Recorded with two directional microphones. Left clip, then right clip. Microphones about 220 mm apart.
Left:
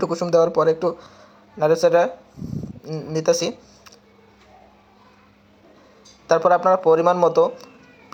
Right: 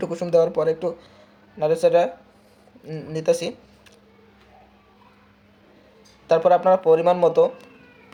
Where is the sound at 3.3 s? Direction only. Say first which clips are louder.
Left 1 dB; centre (ahead or behind).